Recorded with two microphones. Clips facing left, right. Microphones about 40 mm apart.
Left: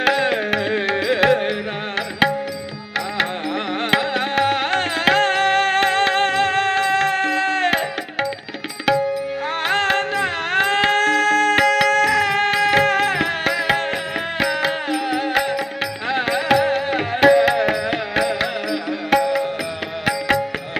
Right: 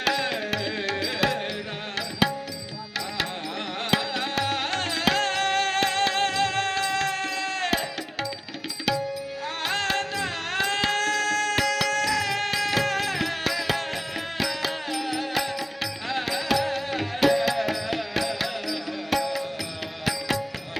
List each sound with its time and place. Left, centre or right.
0.0 s music: left
8.9 s tabla: left
9.6 s music: left